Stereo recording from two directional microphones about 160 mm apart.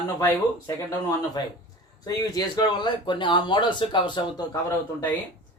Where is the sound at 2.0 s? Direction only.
25° left (ahead or behind).